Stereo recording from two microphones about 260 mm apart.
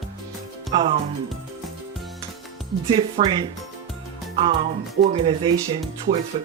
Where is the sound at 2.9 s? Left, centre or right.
Right.